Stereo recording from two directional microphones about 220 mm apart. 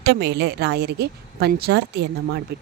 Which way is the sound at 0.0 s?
50° right (ahead or behind).